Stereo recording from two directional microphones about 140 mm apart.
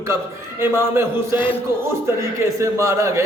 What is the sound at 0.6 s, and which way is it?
A man's voice, 20° right (ahead or behind).